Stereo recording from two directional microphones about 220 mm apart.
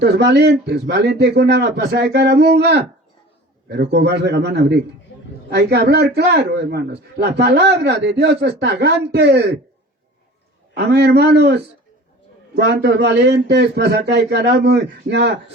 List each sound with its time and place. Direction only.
0.0 s a man's voice: 50° right (ahead or behind)
10.8 s a man's voice: 50° right (ahead or behind)